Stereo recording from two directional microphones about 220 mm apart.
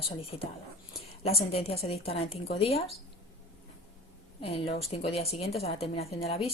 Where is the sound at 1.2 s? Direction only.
25° left (ahead or behind).